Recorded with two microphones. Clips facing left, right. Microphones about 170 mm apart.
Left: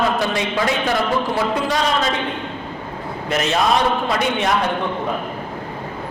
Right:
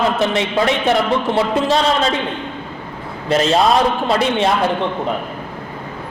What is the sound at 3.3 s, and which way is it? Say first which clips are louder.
Speech: right 6 dB; 30° right (ahead or behind).